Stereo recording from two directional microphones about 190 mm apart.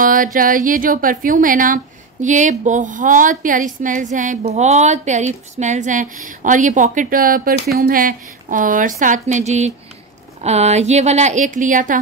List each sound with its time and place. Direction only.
0.0 s a woman's voice: 45° right (ahead or behind)